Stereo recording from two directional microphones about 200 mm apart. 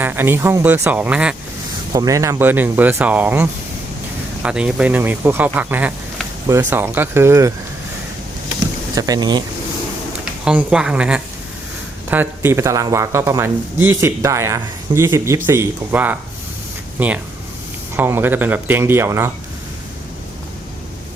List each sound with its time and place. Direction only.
0.0 s a man's voice: 10° right (ahead or behind)
1.9 s a man's voice: 15° right (ahead or behind)
9.0 s speech: 20° right (ahead or behind)
10.4 s a woman's voice: 5° right (ahead or behind)